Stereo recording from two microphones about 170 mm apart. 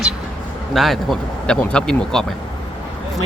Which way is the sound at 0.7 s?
Centre (ahead or behind).